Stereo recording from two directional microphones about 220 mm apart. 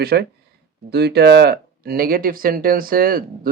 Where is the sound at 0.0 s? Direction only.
45° right (ahead or behind).